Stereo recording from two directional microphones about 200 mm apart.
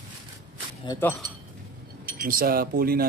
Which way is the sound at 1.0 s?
10° left (ahead or behind).